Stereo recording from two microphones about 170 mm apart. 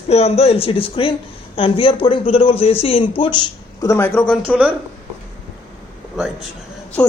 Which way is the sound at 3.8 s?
15° left (ahead or behind).